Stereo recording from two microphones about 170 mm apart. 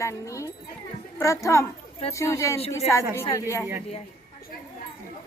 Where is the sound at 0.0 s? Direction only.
15° left (ahead or behind).